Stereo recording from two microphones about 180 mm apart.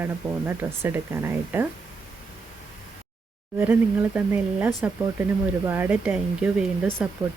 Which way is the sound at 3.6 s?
10° right (ahead or behind).